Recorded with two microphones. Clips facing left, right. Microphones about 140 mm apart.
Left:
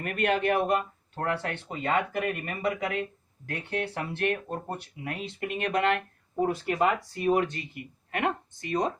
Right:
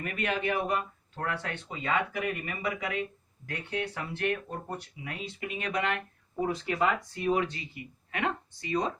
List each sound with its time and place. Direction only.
0.0 s speech: 60° left (ahead or behind)